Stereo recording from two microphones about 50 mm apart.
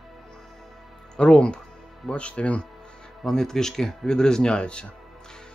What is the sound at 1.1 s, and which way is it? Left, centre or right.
Speech, centre.